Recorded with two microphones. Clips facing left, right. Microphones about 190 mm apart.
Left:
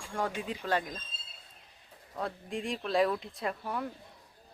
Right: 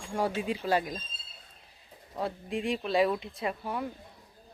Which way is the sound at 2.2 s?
5° right (ahead or behind).